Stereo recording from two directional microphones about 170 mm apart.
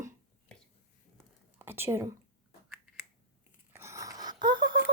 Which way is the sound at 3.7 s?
15° right (ahead or behind).